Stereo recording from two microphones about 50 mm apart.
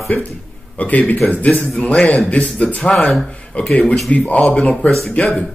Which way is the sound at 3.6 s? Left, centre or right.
Left.